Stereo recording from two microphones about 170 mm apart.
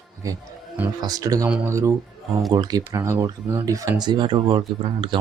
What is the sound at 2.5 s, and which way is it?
Speech, 20° right (ahead or behind).